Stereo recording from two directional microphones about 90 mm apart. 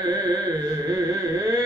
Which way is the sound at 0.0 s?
45° right (ahead or behind).